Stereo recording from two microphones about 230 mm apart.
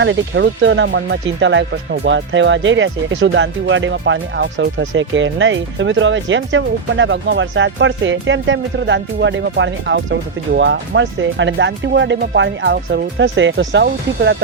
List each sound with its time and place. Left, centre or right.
0.0 s speech: right